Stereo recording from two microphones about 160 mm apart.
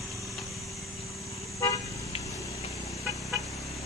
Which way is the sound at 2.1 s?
40° left (ahead or behind).